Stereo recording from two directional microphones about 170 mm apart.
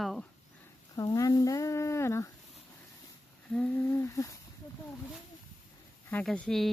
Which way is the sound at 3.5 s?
10° left (ahead or behind).